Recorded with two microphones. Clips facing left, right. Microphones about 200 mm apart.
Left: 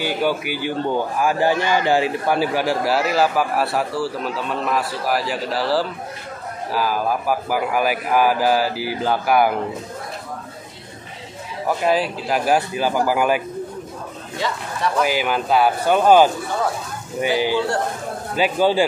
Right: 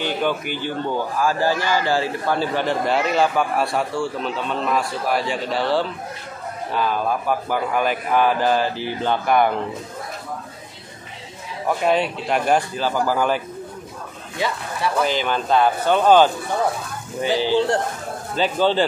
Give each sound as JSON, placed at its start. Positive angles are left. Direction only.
{"t": 0.0, "sound": "a man's voice", "side_deg": 10}
{"t": 11.6, "sound": "a man's voice", "side_deg": 0}
{"t": 15.0, "sound": "a man's voice", "side_deg": 10}